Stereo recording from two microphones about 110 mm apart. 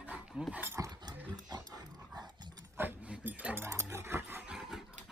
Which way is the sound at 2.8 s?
15° right (ahead or behind).